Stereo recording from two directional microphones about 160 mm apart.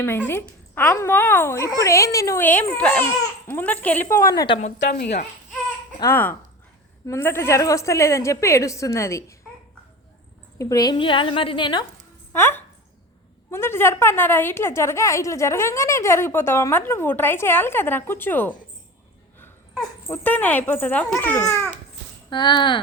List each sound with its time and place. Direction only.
0.0 s a woman's voice: 15° left (ahead or behind)
4.9 s speech: 90° left
6.0 s a woman's voice: 15° left (ahead or behind)
10.6 s a woman's voice: 20° left (ahead or behind)
12.3 s a woman's voice: 15° left (ahead or behind)
20.1 s a woman's voice: 10° left (ahead or behind)
22.3 s a woman's voice: 30° left (ahead or behind)